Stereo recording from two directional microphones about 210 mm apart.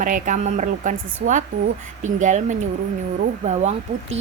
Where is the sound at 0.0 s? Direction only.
40° right (ahead or behind).